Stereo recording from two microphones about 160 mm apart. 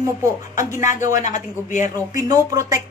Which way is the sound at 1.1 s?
50° left (ahead or behind).